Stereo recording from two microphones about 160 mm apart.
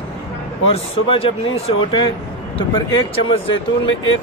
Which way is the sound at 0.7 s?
35° left (ahead or behind).